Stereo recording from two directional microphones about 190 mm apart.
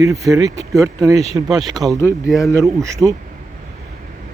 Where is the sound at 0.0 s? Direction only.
15° right (ahead or behind).